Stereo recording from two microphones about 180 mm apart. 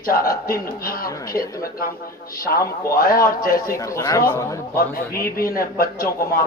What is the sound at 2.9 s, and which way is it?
Speech, 55° left (ahead or behind).